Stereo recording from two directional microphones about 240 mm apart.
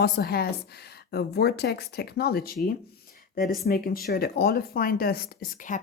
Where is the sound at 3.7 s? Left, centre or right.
Left.